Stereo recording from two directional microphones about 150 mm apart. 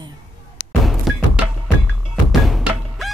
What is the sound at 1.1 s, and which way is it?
Music, centre (ahead or behind).